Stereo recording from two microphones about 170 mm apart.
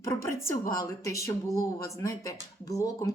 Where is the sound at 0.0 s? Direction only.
15° left (ahead or behind).